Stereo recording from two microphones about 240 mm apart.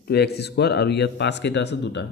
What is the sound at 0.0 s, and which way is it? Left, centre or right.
A man's voice, left.